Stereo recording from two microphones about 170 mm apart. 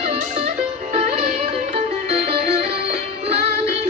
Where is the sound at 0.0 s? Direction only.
40° right (ahead or behind).